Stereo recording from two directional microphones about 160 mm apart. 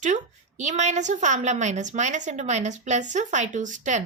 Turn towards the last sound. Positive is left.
turn(degrees=-50)  # may be behind; listen again after turning